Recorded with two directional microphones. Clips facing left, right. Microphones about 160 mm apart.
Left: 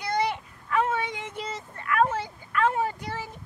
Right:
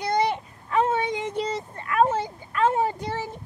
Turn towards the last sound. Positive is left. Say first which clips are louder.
# right 4 dB
turn(degrees=-25)  # may be behind; listen again after turning